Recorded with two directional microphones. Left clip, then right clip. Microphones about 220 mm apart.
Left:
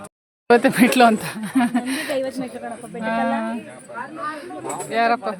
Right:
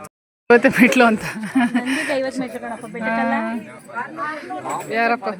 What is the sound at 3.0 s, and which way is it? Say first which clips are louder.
Speech: right 1 dB; centre (ahead or behind).